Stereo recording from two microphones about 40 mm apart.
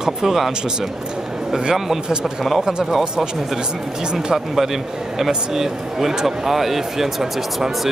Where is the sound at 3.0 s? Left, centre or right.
Centre.